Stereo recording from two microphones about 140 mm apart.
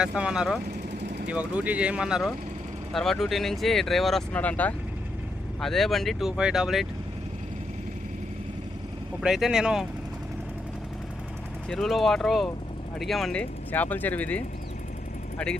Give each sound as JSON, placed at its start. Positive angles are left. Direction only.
{"t": 0.0, "sound": "speech", "side_deg": -5}
{"t": 9.2, "sound": "speech", "side_deg": -5}
{"t": 11.7, "sound": "speech", "side_deg": 0}